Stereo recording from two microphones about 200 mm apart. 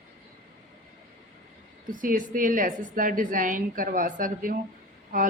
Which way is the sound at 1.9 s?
45° right (ahead or behind).